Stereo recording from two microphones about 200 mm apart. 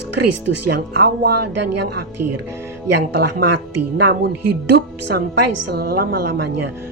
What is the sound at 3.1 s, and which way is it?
A woman's voice, 55° right (ahead or behind).